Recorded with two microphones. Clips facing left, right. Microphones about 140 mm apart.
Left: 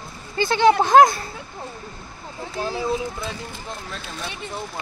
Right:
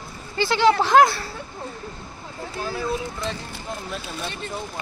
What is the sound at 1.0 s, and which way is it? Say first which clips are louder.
Speech: left 3 dB; 20° left (ahead or behind).